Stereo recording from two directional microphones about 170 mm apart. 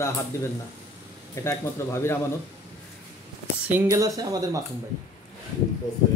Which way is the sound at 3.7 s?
15° right (ahead or behind).